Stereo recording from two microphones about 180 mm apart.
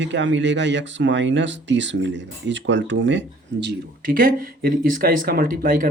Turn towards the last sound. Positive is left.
turn(degrees=-50)  # may be behind; listen again after turning